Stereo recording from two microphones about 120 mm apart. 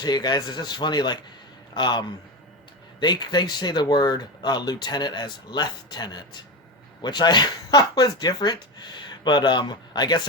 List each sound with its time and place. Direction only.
0.0 s speech: 35° left (ahead or behind)